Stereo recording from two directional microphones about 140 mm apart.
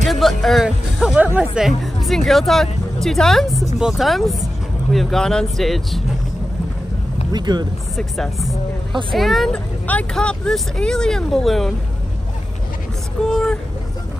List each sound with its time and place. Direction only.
0.0 s speech: centre (ahead or behind)
7.3 s speech: 30° right (ahead or behind)
7.9 s speech: centre (ahead or behind)
13.2 s speech: 5° left (ahead or behind)